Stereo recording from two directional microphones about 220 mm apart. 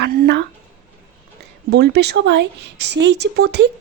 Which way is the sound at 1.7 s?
50° right (ahead or behind).